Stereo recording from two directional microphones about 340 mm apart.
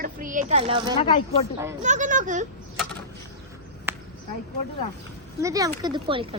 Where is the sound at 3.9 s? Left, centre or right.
Centre.